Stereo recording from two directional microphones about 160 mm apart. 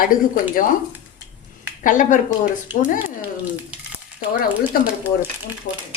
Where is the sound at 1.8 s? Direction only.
55° left (ahead or behind).